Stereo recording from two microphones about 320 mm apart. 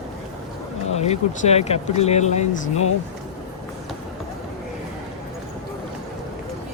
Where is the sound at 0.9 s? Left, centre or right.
Centre.